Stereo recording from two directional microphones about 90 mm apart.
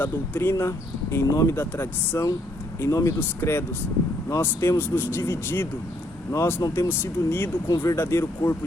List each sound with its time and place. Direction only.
0.0 s speech: 25° left (ahead or behind)